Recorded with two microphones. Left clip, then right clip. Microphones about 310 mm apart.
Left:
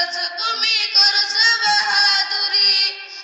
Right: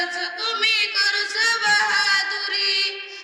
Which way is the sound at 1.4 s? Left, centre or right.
Centre.